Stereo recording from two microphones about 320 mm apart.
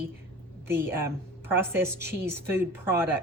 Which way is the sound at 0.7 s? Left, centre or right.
Centre.